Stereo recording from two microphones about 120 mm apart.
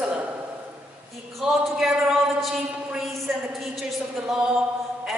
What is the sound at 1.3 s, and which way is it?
A man's voice, centre (ahead or behind).